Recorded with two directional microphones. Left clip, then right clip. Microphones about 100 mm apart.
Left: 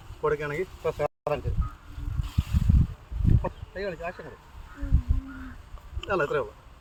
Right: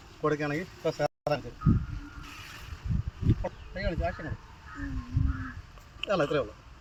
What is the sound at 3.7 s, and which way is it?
Speech, 5° left (ahead or behind).